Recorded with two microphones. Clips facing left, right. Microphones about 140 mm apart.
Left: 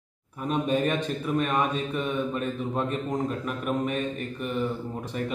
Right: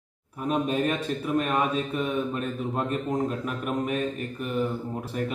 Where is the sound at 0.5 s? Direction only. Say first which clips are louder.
Even; centre (ahead or behind).